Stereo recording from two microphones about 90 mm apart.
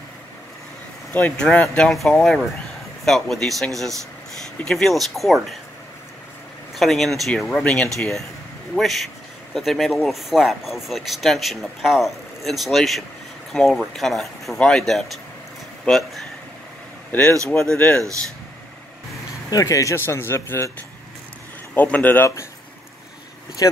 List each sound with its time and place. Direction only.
1.1 s speech: 10° left (ahead or behind)
6.7 s speech: centre (ahead or behind)
17.5 s speech: 10° left (ahead or behind)
19.5 s speech: 35° left (ahead or behind)
21.7 s speech: 20° left (ahead or behind)
23.6 s speech: 45° left (ahead or behind)